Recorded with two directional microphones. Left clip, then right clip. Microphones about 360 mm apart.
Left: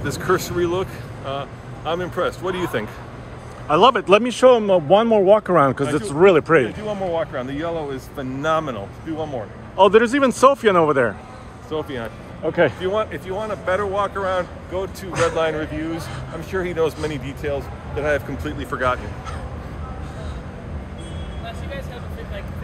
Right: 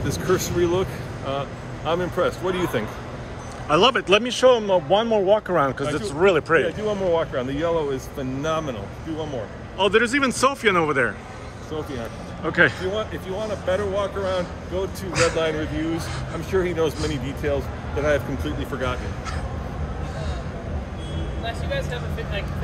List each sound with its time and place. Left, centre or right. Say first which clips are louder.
0.0 s speech: left 2 dB; centre
7.2 s speech: even; centre
9.8 s speech: left 5 dB; centre
12.4 s speech: left 1 dB; centre
16.5 s speech: left 1 dB; centre